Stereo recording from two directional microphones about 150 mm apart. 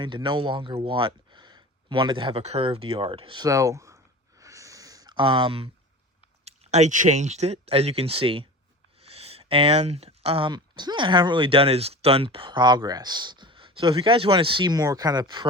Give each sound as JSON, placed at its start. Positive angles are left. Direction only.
{"t": 0.0, "sound": "speech", "side_deg": -30}